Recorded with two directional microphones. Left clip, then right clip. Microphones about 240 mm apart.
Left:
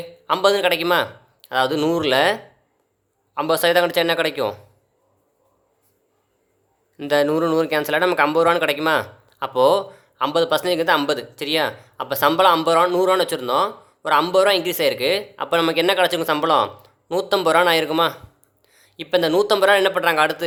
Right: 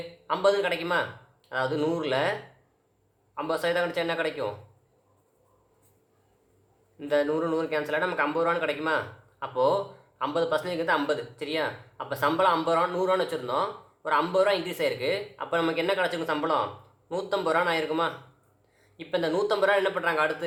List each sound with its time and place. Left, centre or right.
0.3 s speech: left
3.3 s speech: left
6.9 s speech: left